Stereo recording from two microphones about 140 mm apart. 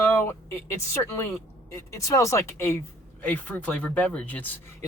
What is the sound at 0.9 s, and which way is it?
Speech, 20° left (ahead or behind).